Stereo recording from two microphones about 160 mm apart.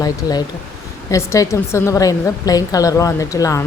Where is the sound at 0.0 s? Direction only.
25° left (ahead or behind).